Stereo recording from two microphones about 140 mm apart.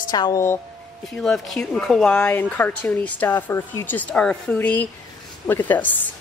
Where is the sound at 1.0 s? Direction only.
5° left (ahead or behind).